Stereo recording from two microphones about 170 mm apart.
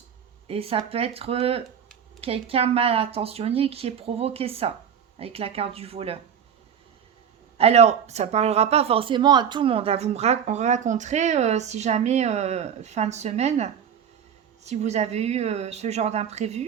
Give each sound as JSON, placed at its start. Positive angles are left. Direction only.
{"t": 0.4, "sound": "speech", "side_deg": -35}
{"t": 7.6, "sound": "speech", "side_deg": -40}